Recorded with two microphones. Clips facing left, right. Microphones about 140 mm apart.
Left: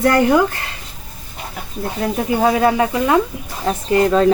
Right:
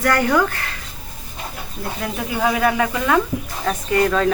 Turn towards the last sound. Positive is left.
turn(degrees=30)  # may be behind; listen again after turning